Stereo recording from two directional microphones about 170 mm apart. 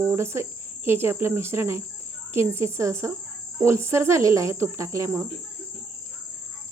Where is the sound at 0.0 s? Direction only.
15° right (ahead or behind).